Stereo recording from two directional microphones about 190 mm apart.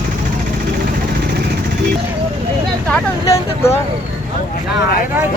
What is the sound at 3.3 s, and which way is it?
Speech, 15° left (ahead or behind).